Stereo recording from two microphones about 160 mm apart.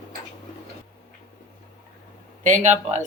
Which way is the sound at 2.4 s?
50° right (ahead or behind).